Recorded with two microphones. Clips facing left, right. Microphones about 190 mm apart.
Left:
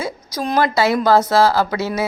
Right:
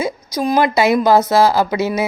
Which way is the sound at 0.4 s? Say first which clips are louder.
Right 3 dB; 10° right (ahead or behind).